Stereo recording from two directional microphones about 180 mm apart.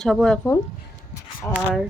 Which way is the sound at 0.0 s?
Centre (ahead or behind).